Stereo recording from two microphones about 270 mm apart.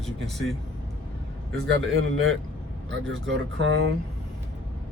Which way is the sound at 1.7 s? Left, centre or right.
Right.